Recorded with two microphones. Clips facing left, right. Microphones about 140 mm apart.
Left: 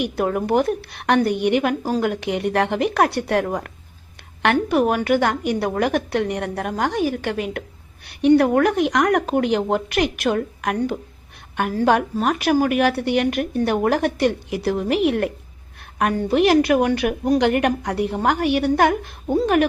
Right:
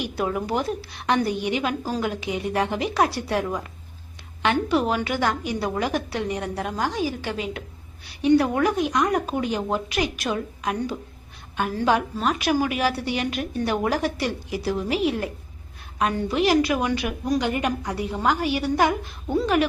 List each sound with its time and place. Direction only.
0.0 s a woman's voice: 55° left (ahead or behind)